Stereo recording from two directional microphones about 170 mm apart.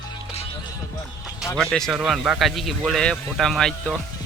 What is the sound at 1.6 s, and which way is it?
Speech, 5° left (ahead or behind).